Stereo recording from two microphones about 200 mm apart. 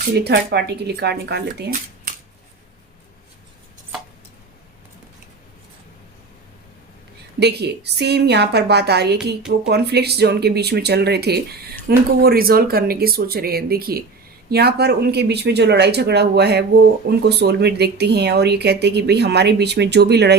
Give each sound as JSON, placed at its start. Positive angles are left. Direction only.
{"t": 0.1, "sound": "speech", "side_deg": -55}
{"t": 7.3, "sound": "speech", "side_deg": -55}